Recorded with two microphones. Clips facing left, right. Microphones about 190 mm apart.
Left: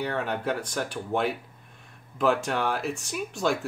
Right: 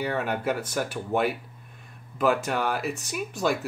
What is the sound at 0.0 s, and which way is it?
Speech, 5° right (ahead or behind).